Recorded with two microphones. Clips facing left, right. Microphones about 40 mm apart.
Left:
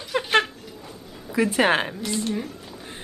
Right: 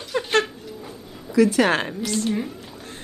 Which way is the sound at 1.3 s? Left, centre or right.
Left.